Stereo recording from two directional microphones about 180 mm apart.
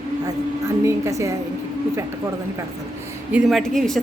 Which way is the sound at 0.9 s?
15° right (ahead or behind).